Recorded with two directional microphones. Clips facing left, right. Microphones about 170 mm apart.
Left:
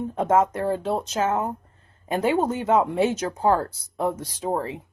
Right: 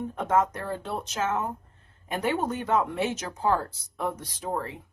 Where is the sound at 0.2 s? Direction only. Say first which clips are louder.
Left 5 dB; 25° left (ahead or behind).